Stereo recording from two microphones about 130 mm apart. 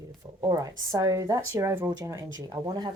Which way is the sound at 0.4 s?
25° right (ahead or behind).